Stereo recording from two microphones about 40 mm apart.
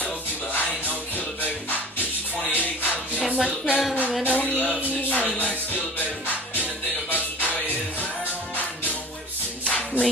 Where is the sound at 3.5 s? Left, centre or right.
Left.